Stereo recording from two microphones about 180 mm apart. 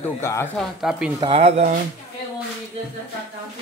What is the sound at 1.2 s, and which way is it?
Speech, 35° right (ahead or behind).